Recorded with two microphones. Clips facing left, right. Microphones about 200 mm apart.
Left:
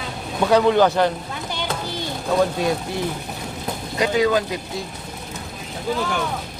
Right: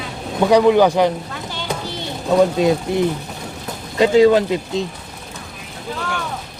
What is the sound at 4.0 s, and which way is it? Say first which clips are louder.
Speech: right 7 dB; 25° right (ahead or behind).